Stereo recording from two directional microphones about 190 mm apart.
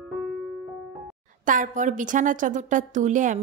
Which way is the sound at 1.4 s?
45° right (ahead or behind).